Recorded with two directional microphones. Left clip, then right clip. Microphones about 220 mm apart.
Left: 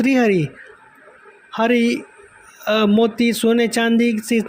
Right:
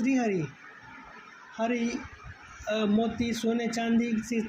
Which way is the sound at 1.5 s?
50° left (ahead or behind).